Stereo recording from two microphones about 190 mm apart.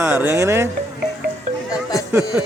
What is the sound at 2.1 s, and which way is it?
Speech, 10° right (ahead or behind).